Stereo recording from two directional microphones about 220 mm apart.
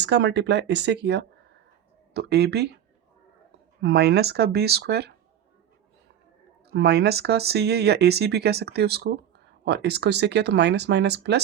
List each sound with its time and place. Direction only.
0.0 s speech: 50° right (ahead or behind)
3.8 s speech: 50° right (ahead or behind)
6.7 s speech: 50° right (ahead or behind)